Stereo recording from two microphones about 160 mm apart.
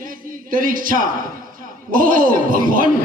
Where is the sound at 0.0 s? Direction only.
60° right (ahead or behind).